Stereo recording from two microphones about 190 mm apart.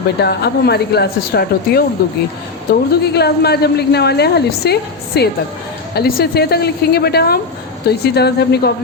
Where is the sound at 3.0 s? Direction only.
60° left (ahead or behind).